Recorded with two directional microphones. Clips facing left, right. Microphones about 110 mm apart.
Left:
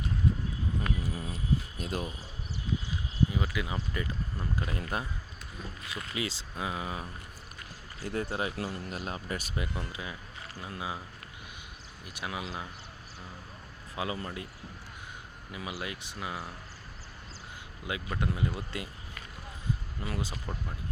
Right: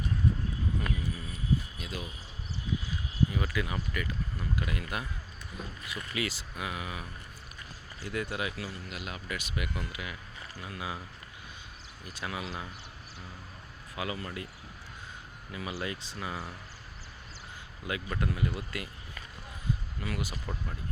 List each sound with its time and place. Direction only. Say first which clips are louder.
0.8 s a sound: left 1 dB; 20° left (ahead or behind)
1.8 s speech: left 5 dB; 45° left (ahead or behind)
3.3 s speech: even; 15° left (ahead or behind)
3.9 s speech: even; 30° left (ahead or behind)
6.1 s speech: even; 25° left (ahead or behind)
8.5 s speech: left 4 dB; 45° left (ahead or behind); by 11.0 s 20° left (ahead or behind)
12.0 s speech: even; 15° left (ahead or behind)
13.9 s speech: left 1 dB; 25° left (ahead or behind)
15.5 s speech: right 2 dB; 15° left (ahead or behind)
17.8 s speech: even; 20° left (ahead or behind)
20.1 s speech: even; 25° left (ahead or behind)